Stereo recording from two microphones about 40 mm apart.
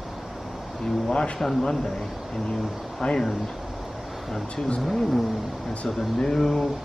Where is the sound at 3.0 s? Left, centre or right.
Centre.